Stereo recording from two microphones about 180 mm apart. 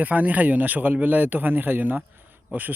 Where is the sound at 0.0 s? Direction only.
10° right (ahead or behind).